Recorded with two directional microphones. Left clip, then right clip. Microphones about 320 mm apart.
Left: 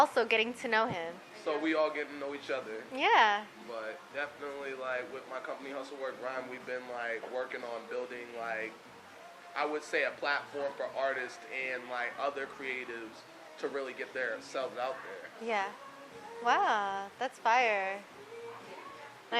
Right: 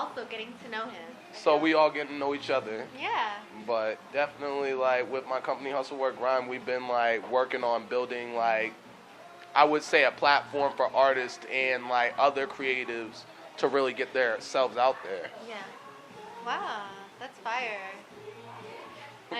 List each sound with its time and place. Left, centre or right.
0.2 s a woman's voice: left
1.5 s speech: right
3.0 s a woman's voice: left
3.7 s speech: right
13.6 s speech: right
16.5 s a woman's voice: left